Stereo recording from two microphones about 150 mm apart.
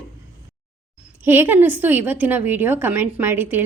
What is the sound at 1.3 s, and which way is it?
A woman's voice, 15° right (ahead or behind).